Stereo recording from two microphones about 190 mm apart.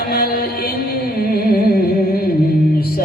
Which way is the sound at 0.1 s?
50° left (ahead or behind).